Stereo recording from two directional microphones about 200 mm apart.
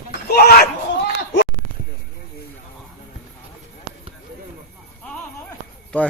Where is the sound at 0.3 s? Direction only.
50° left (ahead or behind).